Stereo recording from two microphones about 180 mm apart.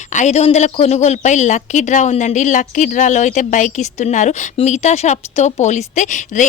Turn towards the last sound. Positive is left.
turn(degrees=45)  # may be behind; listen again after turning